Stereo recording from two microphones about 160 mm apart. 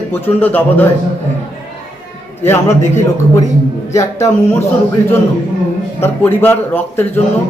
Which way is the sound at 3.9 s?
20° left (ahead or behind).